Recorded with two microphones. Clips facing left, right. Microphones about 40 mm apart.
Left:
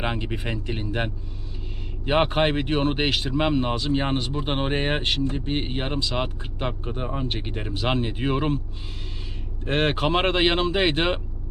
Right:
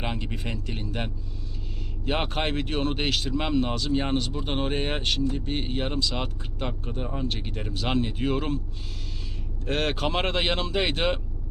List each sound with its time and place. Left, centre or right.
0.0 s speech: left
9.6 s speech: left